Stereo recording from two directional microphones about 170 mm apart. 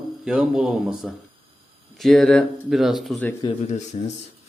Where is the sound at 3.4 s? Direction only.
40° left (ahead or behind).